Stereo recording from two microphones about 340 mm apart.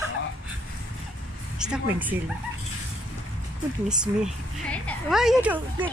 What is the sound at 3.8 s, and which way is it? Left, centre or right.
A woman's voice, centre.